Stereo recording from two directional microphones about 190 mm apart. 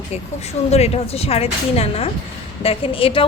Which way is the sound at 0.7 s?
35° left (ahead or behind).